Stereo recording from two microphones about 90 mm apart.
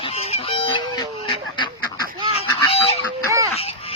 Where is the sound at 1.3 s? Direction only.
60° left (ahead or behind).